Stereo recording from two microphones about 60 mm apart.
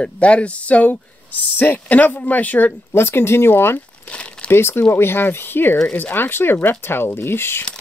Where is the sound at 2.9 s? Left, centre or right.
Left.